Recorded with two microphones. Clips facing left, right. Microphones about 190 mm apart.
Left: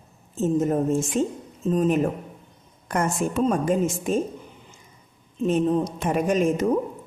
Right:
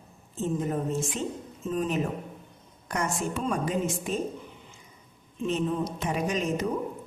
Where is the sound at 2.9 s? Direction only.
50° left (ahead or behind).